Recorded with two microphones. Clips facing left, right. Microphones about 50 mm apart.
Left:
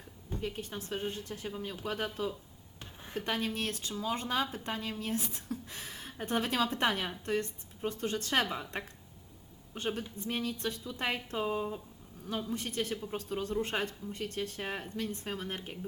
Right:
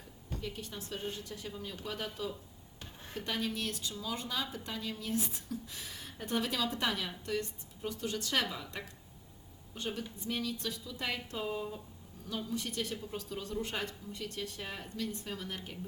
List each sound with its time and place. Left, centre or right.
0.3 s a woman's voice: left
2.8 s a sound: centre
3.2 s speech: left
6.1 s a woman's voice: left
12.4 s speech: left